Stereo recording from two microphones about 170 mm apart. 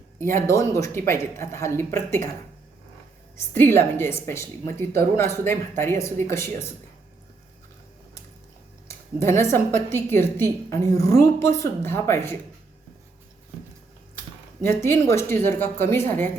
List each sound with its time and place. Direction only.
0.3 s a woman's voice: 15° left (ahead or behind)
3.5 s a woman's voice: 15° left (ahead or behind)
8.9 s a woman's voice: 15° left (ahead or behind)
14.6 s a woman's voice: 15° left (ahead or behind)